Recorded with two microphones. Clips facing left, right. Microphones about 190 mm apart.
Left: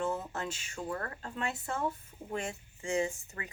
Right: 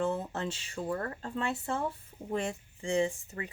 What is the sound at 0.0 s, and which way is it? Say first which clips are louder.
Speech: right 3 dB; 30° right (ahead or behind).